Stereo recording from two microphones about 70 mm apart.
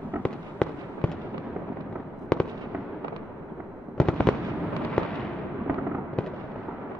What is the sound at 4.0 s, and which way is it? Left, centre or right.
Fireworks, centre.